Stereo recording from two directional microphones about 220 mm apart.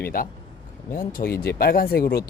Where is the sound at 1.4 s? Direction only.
45° left (ahead or behind).